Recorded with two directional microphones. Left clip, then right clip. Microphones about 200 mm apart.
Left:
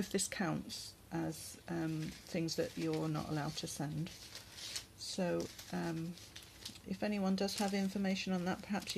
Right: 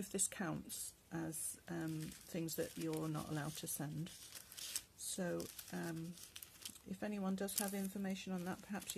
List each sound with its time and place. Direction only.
0.0 s speech: 10° right (ahead or behind)